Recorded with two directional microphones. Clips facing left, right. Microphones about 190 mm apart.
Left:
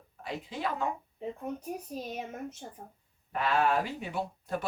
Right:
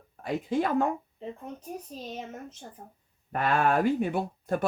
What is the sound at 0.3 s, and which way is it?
Speech, 50° right (ahead or behind).